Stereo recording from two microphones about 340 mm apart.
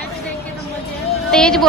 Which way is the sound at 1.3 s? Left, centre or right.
Centre.